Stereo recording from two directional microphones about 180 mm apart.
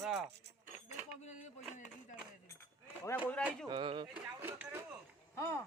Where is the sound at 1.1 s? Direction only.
40° left (ahead or behind).